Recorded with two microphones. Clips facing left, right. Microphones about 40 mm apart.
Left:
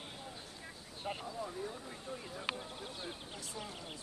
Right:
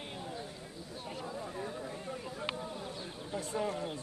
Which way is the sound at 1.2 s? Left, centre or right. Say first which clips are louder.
Right 2 dB; centre.